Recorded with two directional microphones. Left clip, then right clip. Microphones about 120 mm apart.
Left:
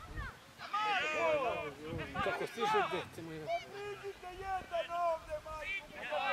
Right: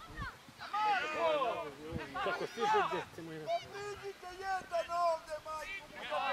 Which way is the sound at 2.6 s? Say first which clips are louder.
Right 2 dB; 5° left (ahead or behind).